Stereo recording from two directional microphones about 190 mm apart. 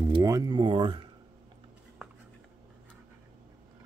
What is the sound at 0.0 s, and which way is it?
Speech, 20° right (ahead or behind).